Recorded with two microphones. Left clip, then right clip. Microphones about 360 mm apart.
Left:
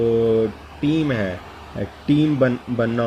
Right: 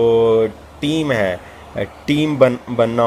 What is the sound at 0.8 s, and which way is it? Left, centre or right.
Speech, centre.